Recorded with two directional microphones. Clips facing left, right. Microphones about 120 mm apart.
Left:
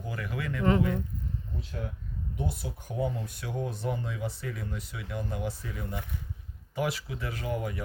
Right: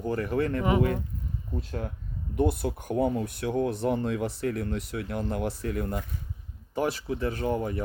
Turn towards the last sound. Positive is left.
turn(degrees=-35)  # may be behind; listen again after turning